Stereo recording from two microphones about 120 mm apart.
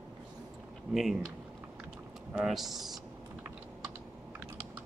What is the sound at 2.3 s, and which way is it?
Speech, centre (ahead or behind).